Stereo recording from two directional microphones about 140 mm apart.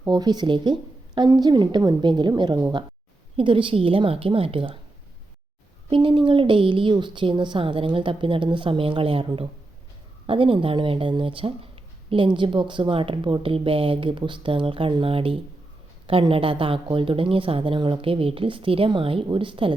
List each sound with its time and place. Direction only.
0.1 s speech: 30° right (ahead or behind)
5.9 s speech: 40° right (ahead or behind)